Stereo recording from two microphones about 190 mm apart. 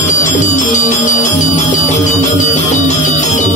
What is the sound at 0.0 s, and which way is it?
Music, 40° left (ahead or behind).